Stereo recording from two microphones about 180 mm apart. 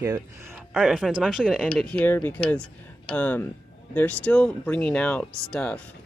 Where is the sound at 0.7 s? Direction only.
Centre (ahead or behind).